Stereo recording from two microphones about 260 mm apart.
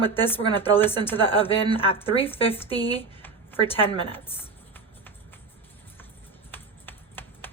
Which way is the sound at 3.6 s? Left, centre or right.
Left.